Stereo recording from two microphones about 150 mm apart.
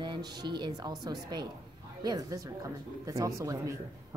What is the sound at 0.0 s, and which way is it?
A man's voice, 30° right (ahead or behind).